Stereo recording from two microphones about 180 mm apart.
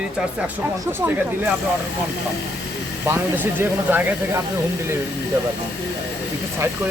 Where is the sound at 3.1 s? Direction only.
10° right (ahead or behind).